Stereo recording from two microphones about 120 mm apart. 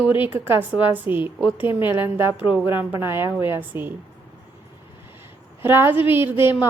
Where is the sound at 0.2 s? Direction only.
20° right (ahead or behind).